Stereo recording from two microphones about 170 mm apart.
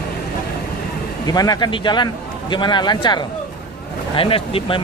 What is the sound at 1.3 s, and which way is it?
Speech, 20° left (ahead or behind).